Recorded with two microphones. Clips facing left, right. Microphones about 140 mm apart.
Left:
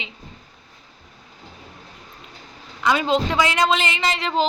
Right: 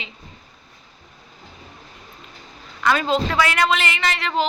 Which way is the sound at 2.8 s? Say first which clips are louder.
Even; 15° left (ahead or behind).